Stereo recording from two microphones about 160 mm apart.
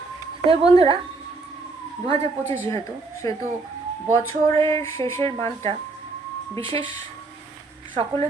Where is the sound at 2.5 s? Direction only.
15° left (ahead or behind).